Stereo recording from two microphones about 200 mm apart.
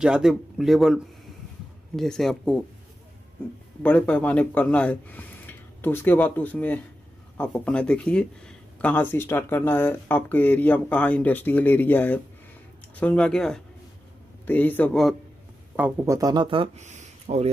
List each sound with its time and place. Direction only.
0.0 s speech: centre (ahead or behind)
3.8 s speech: 10° left (ahead or behind)
15.7 s speech: 5° right (ahead or behind)
16.2 s speech: 20° right (ahead or behind)